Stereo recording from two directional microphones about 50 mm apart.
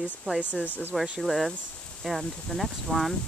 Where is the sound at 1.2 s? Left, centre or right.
Centre.